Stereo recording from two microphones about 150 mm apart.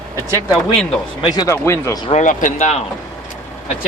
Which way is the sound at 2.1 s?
60° left (ahead or behind).